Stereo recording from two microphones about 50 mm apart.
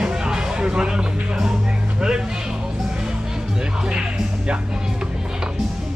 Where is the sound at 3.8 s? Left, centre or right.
Centre.